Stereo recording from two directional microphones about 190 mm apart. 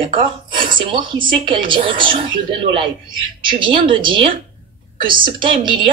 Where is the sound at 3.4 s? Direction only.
25° right (ahead or behind).